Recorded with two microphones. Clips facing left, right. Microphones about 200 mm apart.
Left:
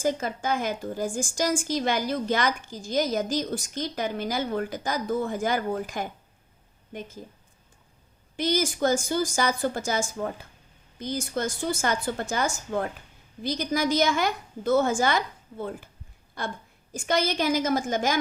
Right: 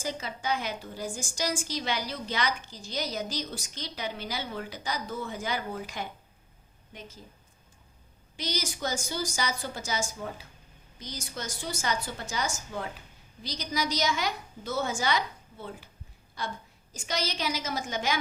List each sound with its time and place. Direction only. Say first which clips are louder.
0.0 s a woman's voice: left 7 dB; 50° left (ahead or behind)
8.4 s a woman's voice: left 9 dB; 50° left (ahead or behind)